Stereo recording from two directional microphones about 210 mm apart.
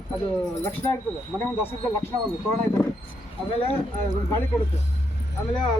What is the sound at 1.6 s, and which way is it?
Speech, 10° left (ahead or behind).